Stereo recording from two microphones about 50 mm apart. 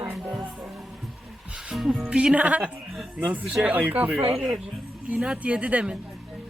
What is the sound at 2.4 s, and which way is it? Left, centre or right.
Speech, right.